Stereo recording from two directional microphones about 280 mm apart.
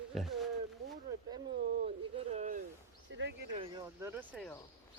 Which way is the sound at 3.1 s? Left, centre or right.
Right.